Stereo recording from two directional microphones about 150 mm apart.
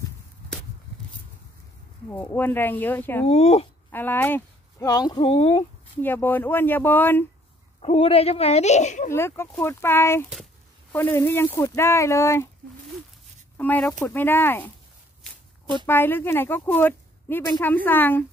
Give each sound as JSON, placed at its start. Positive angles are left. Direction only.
{"t": 2.0, "sound": "speech", "side_deg": 15}
{"t": 3.3, "sound": "speech", "side_deg": 45}
{"t": 3.9, "sound": "speech", "side_deg": 15}
{"t": 4.8, "sound": "speech", "side_deg": 25}
{"t": 5.6, "sound": "speech", "side_deg": 15}
{"t": 7.8, "sound": "speech", "side_deg": 40}
{"t": 9.1, "sound": "speech", "side_deg": 15}
{"t": 13.6, "sound": "speech", "side_deg": 10}
{"t": 15.9, "sound": "speech", "side_deg": 15}